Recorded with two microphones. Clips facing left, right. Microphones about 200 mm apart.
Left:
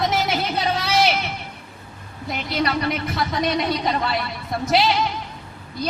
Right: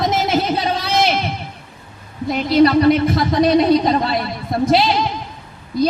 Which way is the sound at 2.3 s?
35° right (ahead or behind).